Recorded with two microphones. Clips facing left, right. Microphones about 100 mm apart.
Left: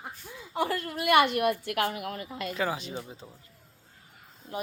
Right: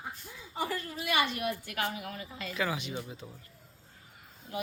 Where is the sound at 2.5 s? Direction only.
35° left (ahead or behind).